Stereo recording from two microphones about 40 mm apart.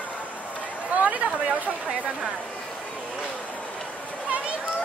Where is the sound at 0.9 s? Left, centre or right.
Right.